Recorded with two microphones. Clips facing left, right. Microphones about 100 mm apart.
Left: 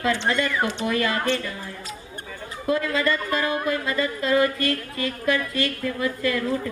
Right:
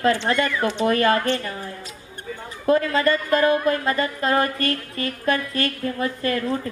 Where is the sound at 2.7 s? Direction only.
45° right (ahead or behind).